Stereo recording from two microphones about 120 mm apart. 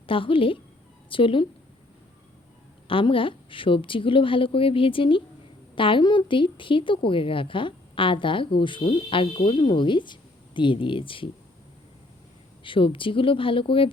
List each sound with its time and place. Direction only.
0.1 s a woman's voice: 50° left (ahead or behind)
2.8 s a woman's voice: 50° left (ahead or behind)
12.6 s a woman's voice: 45° left (ahead or behind)